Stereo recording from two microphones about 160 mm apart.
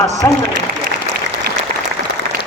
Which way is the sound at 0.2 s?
10° left (ahead or behind).